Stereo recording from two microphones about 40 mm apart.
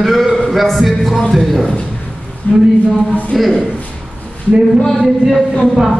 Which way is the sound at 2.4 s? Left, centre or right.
Left.